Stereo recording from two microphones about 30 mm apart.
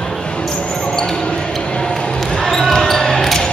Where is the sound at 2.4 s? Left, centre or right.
Centre.